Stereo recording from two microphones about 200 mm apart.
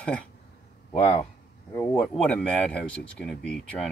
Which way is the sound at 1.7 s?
5° left (ahead or behind).